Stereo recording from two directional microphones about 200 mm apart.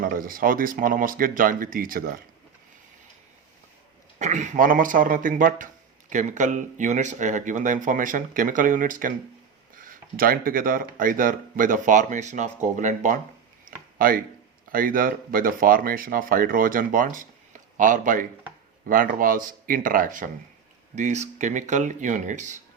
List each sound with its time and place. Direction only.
0.0 s speech: 45° right (ahead or behind)
4.2 s speech: 35° right (ahead or behind)
13.7 s a sound: 45° right (ahead or behind)
14.7 s speech: 45° right (ahead or behind)